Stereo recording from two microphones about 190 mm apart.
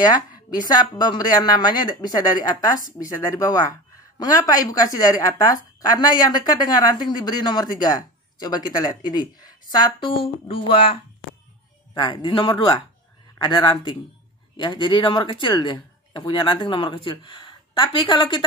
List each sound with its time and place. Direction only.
0.0 s speech: 20° left (ahead or behind)